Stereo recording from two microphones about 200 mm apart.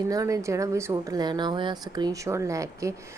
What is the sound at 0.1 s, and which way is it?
Speech, 15° right (ahead or behind).